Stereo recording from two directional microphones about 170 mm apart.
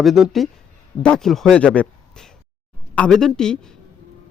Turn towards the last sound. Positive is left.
turn(degrees=5)  # may be behind; listen again after turning